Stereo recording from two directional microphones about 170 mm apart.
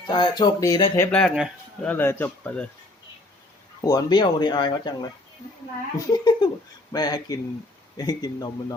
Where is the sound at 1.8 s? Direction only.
10° left (ahead or behind).